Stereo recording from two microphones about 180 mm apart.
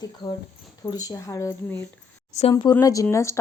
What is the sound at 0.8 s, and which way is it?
Speech, 20° left (ahead or behind).